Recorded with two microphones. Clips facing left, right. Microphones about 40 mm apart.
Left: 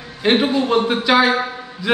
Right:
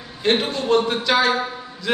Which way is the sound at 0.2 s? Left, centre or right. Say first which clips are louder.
Left 4 dB; centre.